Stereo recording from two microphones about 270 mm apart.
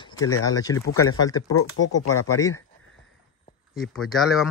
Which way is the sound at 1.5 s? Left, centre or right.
Left.